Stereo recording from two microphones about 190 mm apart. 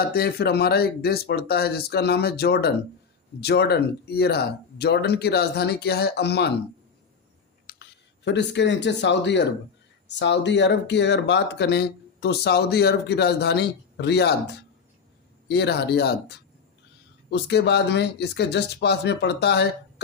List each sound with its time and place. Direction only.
0.1 s speech: 55° left (ahead or behind)
7.7 s speech: 60° left (ahead or behind)
17.3 s speech: 60° left (ahead or behind)